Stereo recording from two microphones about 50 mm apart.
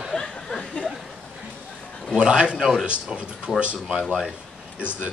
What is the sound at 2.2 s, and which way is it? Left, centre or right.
Speech, centre.